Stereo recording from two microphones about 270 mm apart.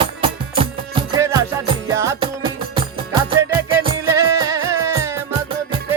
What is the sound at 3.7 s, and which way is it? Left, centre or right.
Music, centre.